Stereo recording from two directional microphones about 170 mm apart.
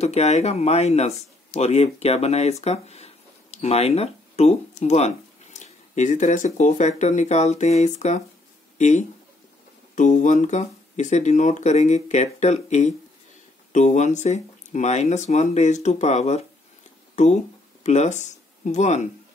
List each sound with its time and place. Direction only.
0.0 s speech: 40° left (ahead or behind)